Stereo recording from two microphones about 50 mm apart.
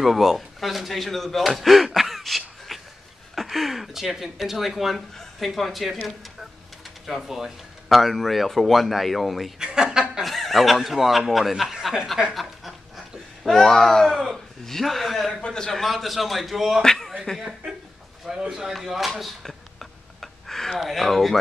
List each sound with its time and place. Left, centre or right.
0.0 s speech: centre
7.2 s speech: centre
9.6 s chuckle: centre
10.2 s speech: centre
12.4 s snicker: centre
13.6 s a sound: centre
14.2 s speech: centre
15.4 s a sound: centre
15.7 s speech: centre
17.4 s speech: centre
18.2 s a sound: centre
20.8 s speech: centre